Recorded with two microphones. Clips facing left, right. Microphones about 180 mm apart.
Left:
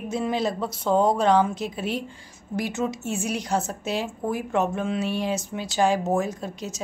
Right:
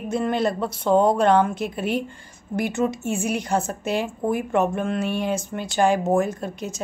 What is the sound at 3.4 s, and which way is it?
Speech, centre (ahead or behind).